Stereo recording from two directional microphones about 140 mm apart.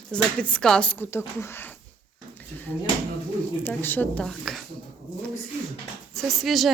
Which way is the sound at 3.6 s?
15° left (ahead or behind).